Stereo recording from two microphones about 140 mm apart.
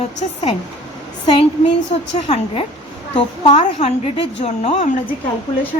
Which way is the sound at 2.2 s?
50° left (ahead or behind).